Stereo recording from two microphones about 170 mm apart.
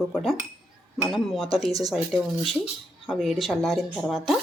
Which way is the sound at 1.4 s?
35° left (ahead or behind).